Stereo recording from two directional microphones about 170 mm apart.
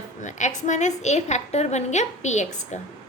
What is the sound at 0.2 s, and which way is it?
A woman's voice, 45° left (ahead or behind).